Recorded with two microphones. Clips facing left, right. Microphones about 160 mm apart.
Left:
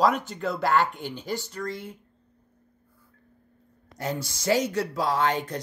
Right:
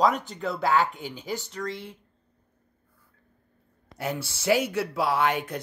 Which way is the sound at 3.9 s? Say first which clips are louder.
Even; 10° right (ahead or behind).